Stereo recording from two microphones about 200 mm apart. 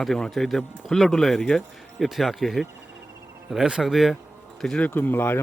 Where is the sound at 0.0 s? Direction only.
Centre (ahead or behind).